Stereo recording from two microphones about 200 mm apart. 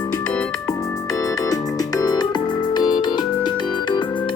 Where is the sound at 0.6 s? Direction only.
15° left (ahead or behind).